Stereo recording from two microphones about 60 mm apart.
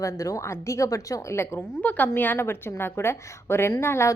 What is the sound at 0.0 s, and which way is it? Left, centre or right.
A woman's voice, left.